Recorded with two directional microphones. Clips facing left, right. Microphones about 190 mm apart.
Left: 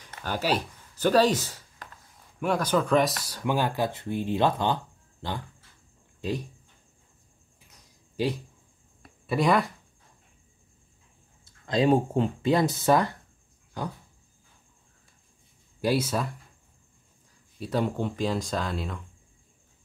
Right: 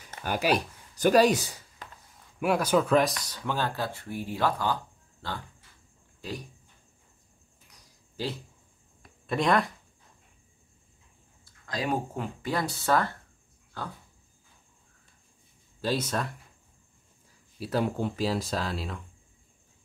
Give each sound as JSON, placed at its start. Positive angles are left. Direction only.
{"t": 0.0, "sound": "speech", "side_deg": -10}
{"t": 3.3, "sound": "speech", "side_deg": 15}
{"t": 8.2, "sound": "speech", "side_deg": 15}
{"t": 9.3, "sound": "speech", "side_deg": 0}
{"t": 11.4, "sound": "speech", "side_deg": 25}
{"t": 15.8, "sound": "speech", "side_deg": 10}
{"t": 17.6, "sound": "speech", "side_deg": -5}